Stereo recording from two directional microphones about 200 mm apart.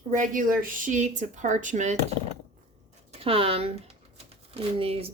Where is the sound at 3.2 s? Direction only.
30° right (ahead or behind).